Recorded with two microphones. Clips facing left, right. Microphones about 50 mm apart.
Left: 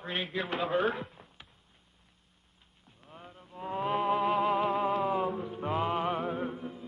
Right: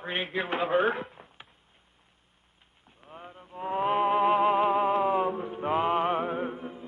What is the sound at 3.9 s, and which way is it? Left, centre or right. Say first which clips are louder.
Music: right 4 dB; centre.